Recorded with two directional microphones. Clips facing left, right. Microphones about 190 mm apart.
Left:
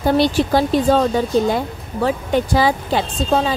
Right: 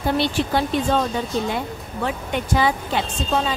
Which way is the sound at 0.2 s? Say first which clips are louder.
Left 5 dB; 40° left (ahead or behind).